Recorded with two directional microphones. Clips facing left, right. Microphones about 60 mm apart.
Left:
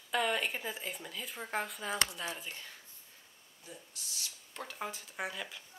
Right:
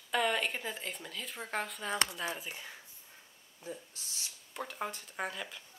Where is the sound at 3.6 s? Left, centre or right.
Right.